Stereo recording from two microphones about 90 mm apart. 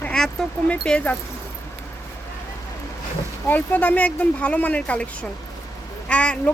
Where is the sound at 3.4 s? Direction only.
20° left (ahead or behind).